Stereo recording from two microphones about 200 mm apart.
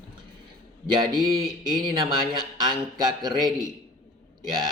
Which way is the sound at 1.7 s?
20° right (ahead or behind).